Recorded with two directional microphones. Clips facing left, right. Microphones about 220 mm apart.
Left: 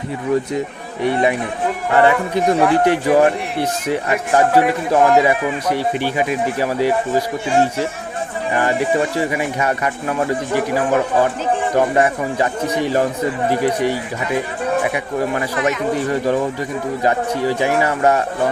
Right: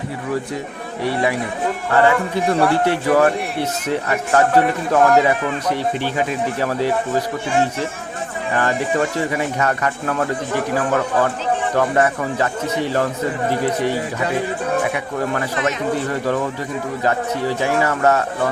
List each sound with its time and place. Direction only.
1.0 s a man's voice: 20° left (ahead or behind)
8.5 s a man's voice: 15° left (ahead or behind)
14.9 s a man's voice: 15° left (ahead or behind)